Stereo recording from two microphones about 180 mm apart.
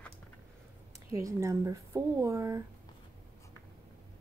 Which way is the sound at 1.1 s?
15° right (ahead or behind).